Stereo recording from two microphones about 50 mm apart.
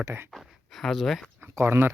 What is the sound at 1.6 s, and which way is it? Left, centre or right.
Speech, right.